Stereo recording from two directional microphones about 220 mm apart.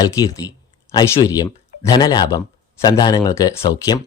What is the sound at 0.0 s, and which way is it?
Speech, 15° left (ahead or behind).